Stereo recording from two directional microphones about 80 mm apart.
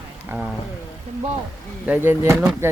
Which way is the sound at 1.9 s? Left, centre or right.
Right.